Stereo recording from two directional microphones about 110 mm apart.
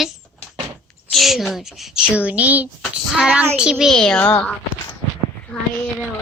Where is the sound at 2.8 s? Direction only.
Centre (ahead or behind).